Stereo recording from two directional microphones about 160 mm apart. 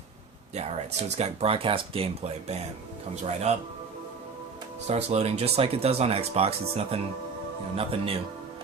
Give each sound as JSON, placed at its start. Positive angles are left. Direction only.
{"t": 1.1, "sound": "speech", "side_deg": -40}
{"t": 4.9, "sound": "speech", "side_deg": -40}